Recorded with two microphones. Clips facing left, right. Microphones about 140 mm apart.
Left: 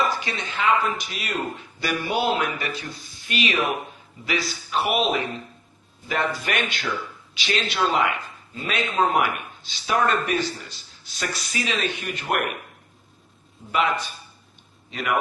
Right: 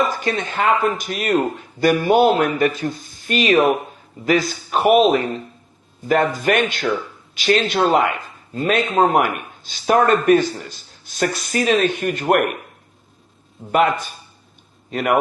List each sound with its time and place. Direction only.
0.0 s a man's voice: 50° right (ahead or behind)
13.7 s a man's voice: 50° right (ahead or behind)